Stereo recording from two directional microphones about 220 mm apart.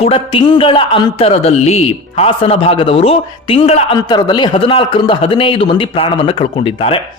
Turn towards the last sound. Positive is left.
turn(degrees=25)  # may be behind; listen again after turning